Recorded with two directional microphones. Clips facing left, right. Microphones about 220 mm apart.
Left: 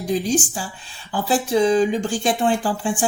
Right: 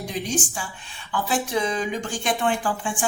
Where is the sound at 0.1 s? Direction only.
35° left (ahead or behind).